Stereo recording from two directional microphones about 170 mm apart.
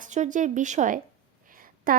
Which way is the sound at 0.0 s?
45° right (ahead or behind).